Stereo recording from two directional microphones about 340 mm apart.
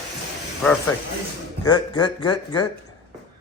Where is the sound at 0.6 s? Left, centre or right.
Centre.